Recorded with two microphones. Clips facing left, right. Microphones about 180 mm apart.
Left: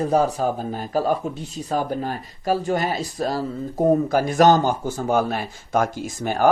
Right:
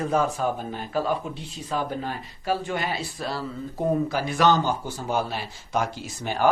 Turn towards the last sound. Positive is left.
turn(degrees=50)  # may be behind; listen again after turning